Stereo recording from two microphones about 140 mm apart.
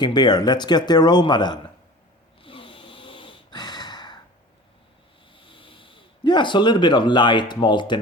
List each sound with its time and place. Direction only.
0.0 s speech: 30° left (ahead or behind)
2.4 s snoring: 40° left (ahead or behind)
5.3 s speech: 40° left (ahead or behind)